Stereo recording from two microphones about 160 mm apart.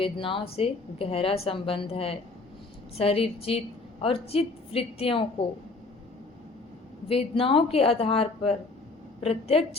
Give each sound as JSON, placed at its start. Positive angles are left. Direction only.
{"t": 0.0, "sound": "a woman's voice", "side_deg": 35}
{"t": 7.1, "sound": "a woman's voice", "side_deg": 35}